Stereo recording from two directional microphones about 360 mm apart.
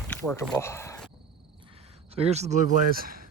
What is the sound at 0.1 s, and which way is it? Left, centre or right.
Speech, centre.